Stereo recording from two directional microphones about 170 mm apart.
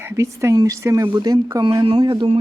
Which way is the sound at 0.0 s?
15° right (ahead or behind).